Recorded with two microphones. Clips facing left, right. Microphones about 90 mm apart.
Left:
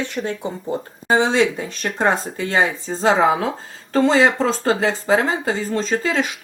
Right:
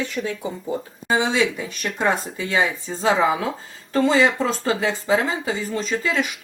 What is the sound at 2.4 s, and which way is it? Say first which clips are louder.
Speech: left 2 dB; 50° left (ahead or behind).